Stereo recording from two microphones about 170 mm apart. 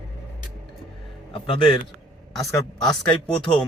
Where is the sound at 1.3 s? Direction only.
35° left (ahead or behind).